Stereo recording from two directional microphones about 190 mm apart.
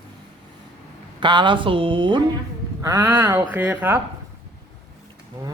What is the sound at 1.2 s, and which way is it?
Speech, 25° right (ahead or behind).